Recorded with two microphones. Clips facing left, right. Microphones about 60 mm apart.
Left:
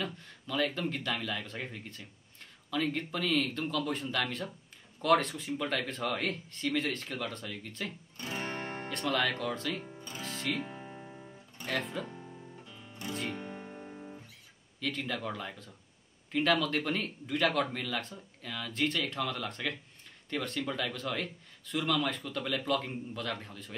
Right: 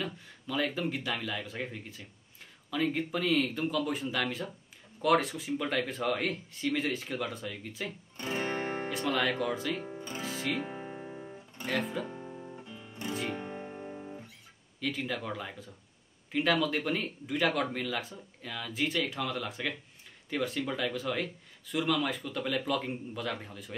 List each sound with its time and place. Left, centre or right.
0.0 s speech: centre
8.2 s music: right
8.8 s speech: centre
9.8 s music: right
10.2 s speech: centre
10.6 s music: right
11.6 s speech: centre
12.1 s guitar: centre
13.1 s speech: centre
13.4 s guitar: centre
14.8 s speech: centre